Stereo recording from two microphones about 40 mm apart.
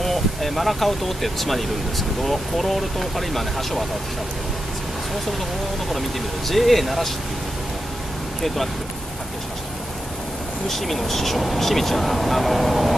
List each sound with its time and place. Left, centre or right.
0.0 s speech: centre
5.9 s speech: centre
10.7 s speech: centre